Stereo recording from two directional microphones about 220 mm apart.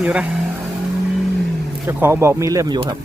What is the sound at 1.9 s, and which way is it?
Speech, 10° right (ahead or behind).